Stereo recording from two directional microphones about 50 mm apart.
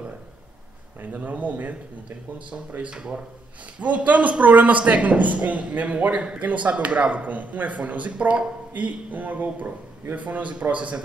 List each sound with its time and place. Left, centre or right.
1.0 s speech: right
2.8 s a man's voice: centre